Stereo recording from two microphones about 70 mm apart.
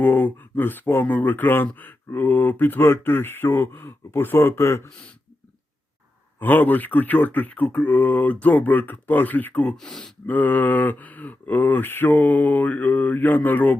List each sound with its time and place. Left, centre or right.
0.0 s speech: left
6.4 s speech: left
9.7 s speech: centre
10.2 s speech: left